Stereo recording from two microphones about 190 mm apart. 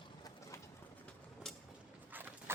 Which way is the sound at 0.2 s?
20° left (ahead or behind).